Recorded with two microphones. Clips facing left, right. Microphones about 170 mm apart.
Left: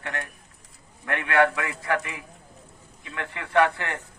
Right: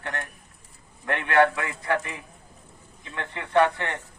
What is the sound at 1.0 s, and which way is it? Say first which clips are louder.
A man's voice: right 1 dB; 30° right (ahead or behind).